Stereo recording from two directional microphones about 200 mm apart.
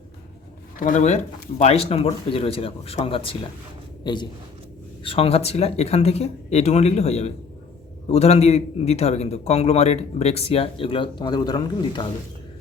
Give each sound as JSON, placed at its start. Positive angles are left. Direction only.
{"t": 0.8, "sound": "a man's voice", "side_deg": 40}